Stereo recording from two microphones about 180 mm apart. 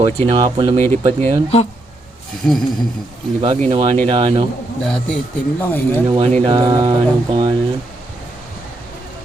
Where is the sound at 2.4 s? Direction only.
5° left (ahead or behind).